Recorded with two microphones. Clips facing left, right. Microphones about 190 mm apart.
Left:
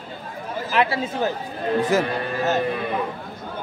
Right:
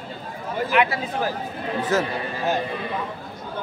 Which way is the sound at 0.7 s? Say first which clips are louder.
Left 1 dB; 30° left (ahead or behind).